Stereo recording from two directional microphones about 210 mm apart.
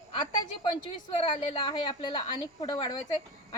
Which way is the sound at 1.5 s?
25° left (ahead or behind).